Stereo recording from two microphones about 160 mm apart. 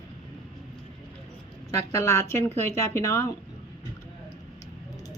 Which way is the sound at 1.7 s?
15° left (ahead or behind).